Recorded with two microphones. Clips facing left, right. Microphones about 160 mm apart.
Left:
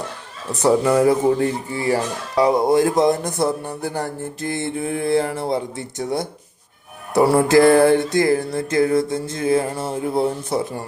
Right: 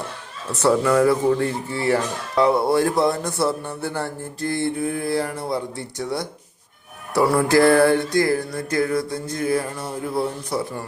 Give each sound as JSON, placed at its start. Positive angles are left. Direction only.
{"t": 0.6, "sound": "speech", "side_deg": 20}
{"t": 4.0, "sound": "music", "side_deg": 20}